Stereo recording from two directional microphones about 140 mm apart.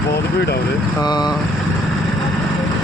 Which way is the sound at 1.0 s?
30° left (ahead or behind).